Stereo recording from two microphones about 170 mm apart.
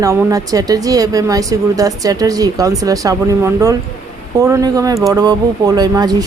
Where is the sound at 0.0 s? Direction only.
20° right (ahead or behind).